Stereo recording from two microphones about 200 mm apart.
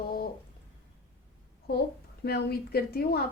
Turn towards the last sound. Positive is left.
turn(degrees=50)  # may be behind; listen again after turning